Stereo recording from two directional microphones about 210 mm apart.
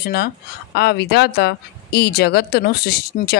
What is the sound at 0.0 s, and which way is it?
Speech, 45° left (ahead or behind).